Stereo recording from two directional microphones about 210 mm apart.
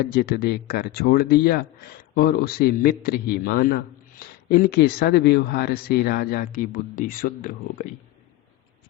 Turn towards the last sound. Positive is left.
turn(degrees=40)  # may be behind; listen again after turning